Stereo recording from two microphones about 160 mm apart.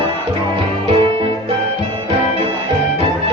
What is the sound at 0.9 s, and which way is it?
Music, 40° right (ahead or behind).